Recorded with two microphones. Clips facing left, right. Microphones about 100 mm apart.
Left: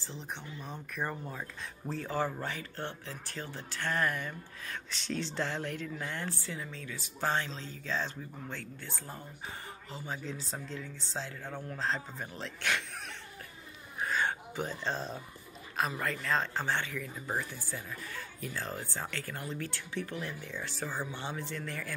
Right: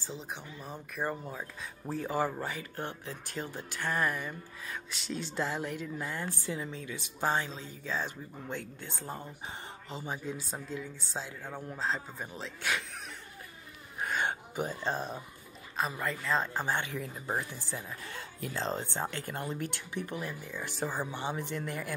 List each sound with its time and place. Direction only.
0.0 s speech: 10° right (ahead or behind)
14.1 s a sound: 15° right (ahead or behind)
15.8 s speech: centre (ahead or behind); by 21.9 s 15° right (ahead or behind)